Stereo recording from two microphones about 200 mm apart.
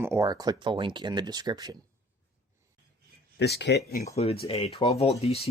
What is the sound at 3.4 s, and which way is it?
Speech, 55° left (ahead or behind).